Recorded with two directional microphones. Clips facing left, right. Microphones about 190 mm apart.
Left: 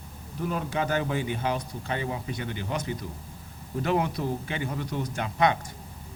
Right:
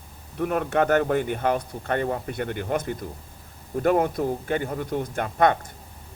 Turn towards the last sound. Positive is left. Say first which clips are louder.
# right 4 dB
turn(degrees=-50)  # may be behind; listen again after turning